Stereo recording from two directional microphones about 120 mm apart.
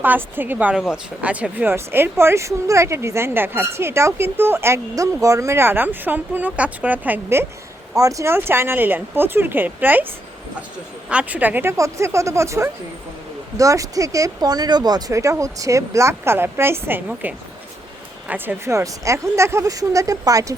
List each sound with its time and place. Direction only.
0.0 s speech: 15° right (ahead or behind)
7.9 s speech: 30° right (ahead or behind)
11.1 s speech: 10° right (ahead or behind); by 20.6 s 30° right (ahead or behind)